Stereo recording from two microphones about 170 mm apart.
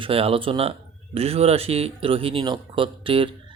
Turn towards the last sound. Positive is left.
turn(degrees=-30)  # may be behind; listen again after turning